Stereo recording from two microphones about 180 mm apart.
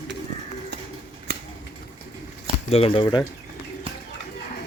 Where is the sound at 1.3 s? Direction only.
65° right (ahead or behind).